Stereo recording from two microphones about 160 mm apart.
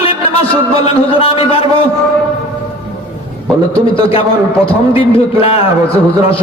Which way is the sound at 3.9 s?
35° left (ahead or behind).